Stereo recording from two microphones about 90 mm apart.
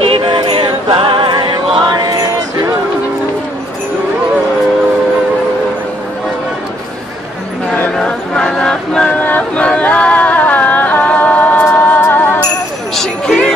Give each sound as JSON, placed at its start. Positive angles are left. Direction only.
{"t": 0.0, "sound": "music", "side_deg": -80}
{"t": 7.9, "sound": "choir", "side_deg": 5}
{"t": 12.9, "sound": "a sound", "side_deg": 5}